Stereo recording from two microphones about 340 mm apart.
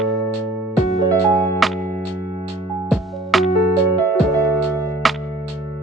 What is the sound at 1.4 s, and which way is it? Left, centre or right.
Music, centre.